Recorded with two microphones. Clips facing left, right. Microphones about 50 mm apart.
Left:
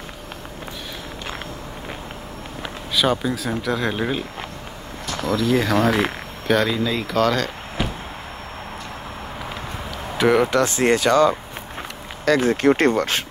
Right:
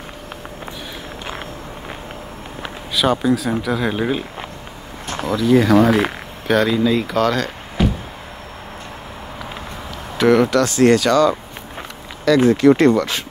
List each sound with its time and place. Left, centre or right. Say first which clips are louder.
2.9 s speech: right 4 dB; centre
5.0 s a sound: right 1 dB; right
5.3 s speech: right 6 dB; centre
10.1 s speech: right 3 dB; centre
10.5 s speech: right 4 dB; left
12.4 s speech: right 6 dB; left